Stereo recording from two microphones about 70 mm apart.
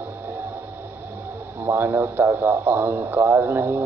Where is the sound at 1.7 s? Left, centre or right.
Right.